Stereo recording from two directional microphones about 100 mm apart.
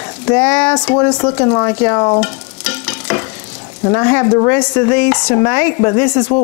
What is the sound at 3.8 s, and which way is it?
Speech, 25° left (ahead or behind).